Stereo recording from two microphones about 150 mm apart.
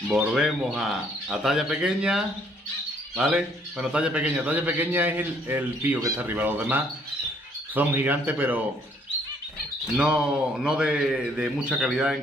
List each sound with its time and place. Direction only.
0.1 s a man's voice: centre (ahead or behind)
9.9 s a man's voice: 5° right (ahead or behind)